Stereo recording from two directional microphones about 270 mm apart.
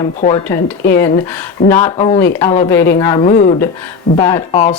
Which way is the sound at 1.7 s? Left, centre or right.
Left.